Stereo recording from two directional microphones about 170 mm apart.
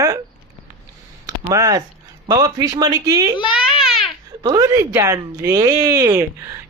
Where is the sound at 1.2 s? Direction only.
20° right (ahead or behind).